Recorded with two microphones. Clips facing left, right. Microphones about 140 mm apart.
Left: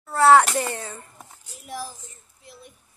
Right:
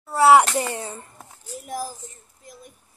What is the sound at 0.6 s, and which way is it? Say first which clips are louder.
Speech: right 1 dB; 20° right (ahead or behind).